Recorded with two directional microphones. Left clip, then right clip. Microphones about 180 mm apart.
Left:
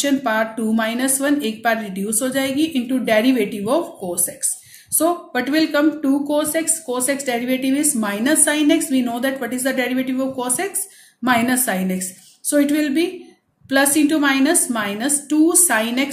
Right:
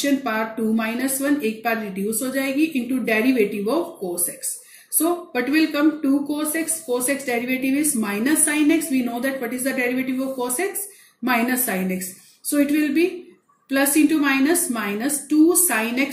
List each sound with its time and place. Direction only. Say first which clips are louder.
0.0 s speech: left 4 dB; 35° left (ahead or behind)